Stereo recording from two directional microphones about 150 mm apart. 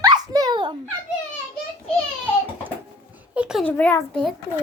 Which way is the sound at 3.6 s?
10° left (ahead or behind).